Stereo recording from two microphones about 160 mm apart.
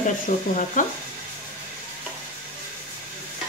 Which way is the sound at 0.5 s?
50° left (ahead or behind).